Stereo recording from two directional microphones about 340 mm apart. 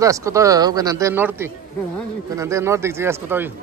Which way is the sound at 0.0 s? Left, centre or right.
Centre.